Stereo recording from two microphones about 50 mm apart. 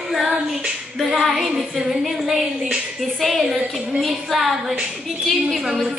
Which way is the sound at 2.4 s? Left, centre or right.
Centre.